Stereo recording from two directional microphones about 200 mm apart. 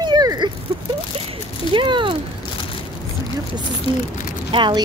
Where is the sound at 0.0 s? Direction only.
20° right (ahead or behind).